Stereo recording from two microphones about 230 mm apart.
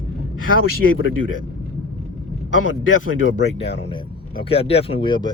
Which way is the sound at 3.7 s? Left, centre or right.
Left.